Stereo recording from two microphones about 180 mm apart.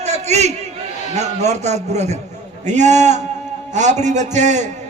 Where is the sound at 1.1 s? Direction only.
40° right (ahead or behind).